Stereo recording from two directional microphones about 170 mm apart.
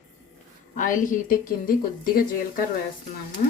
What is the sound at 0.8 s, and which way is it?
A woman's voice, 50° left (ahead or behind).